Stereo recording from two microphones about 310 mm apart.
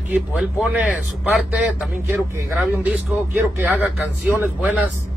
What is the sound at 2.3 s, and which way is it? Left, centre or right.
Speech, centre.